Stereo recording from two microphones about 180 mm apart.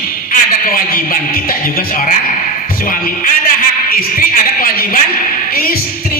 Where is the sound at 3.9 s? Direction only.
50° left (ahead or behind).